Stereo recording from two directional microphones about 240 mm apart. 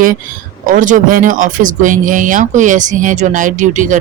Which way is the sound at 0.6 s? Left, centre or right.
Right.